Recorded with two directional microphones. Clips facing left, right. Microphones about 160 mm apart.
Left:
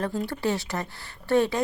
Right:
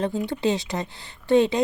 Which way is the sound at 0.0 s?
20° right (ahead or behind).